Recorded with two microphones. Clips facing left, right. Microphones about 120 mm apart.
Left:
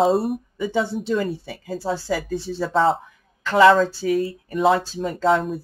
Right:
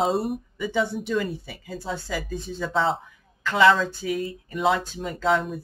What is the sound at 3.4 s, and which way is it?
Speech, 30° left (ahead or behind).